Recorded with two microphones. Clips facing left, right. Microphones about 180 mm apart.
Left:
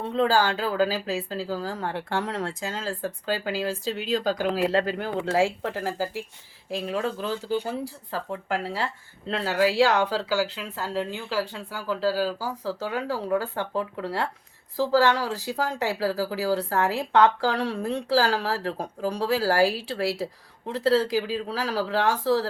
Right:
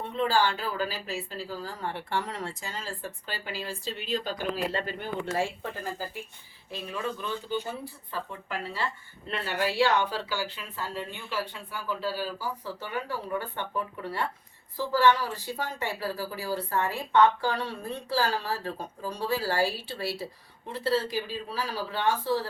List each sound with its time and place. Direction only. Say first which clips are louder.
0.2 s speech: left 4 dB; 90° left